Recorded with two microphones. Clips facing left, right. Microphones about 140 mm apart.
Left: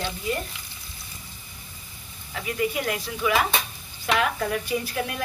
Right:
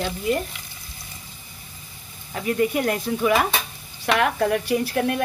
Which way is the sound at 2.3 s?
50° right (ahead or behind).